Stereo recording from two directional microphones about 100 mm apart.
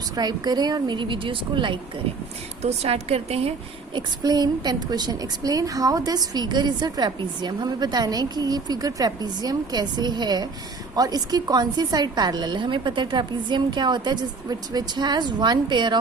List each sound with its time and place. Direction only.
0.2 s a woman's voice: 45° right (ahead or behind)
2.6 s a woman's voice: 90° right
3.9 s a woman's voice: 40° right (ahead or behind)